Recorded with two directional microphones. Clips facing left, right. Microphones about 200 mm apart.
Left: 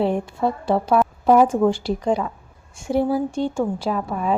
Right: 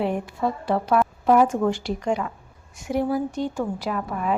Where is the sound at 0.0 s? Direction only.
30° left (ahead or behind).